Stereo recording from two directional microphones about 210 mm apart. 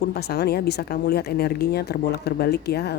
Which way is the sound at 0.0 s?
50° left (ahead or behind).